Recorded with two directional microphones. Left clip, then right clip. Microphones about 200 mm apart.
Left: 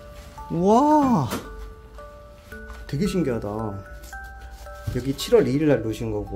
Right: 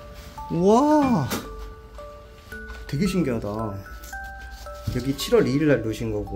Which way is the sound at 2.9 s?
5° left (ahead or behind).